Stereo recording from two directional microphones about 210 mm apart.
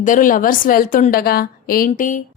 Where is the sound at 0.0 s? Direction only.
40° left (ahead or behind).